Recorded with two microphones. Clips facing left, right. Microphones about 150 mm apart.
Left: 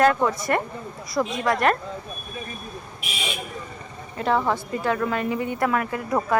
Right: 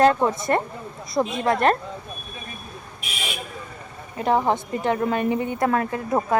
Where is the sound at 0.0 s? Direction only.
25° right (ahead or behind).